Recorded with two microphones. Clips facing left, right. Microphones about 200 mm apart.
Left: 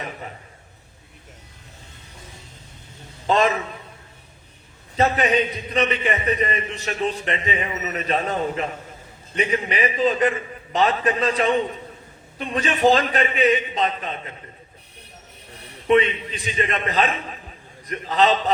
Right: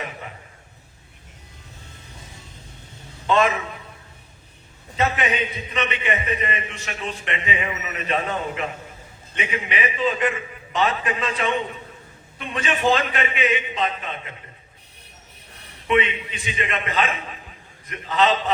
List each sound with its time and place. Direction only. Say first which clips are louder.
3.2 s a man's voice: even; 35° left (ahead or behind)
4.9 s a man's voice: left 4 dB; 35° left (ahead or behind)
15.9 s a man's voice: left 4 dB; 35° left (ahead or behind)